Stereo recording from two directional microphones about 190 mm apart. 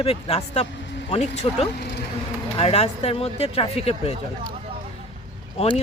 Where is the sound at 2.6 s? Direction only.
30° left (ahead or behind).